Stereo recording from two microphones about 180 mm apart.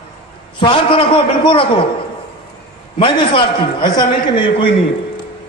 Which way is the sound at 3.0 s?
30° left (ahead or behind).